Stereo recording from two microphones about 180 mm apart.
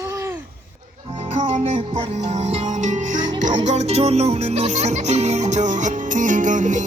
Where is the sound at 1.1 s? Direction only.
40° right (ahead or behind).